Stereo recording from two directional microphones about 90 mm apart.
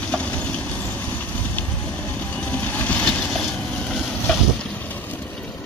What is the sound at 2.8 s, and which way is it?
Vehicle, 15° left (ahead or behind).